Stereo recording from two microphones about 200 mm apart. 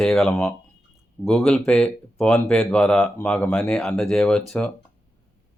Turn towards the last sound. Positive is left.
turn(degrees=5)  # may be behind; listen again after turning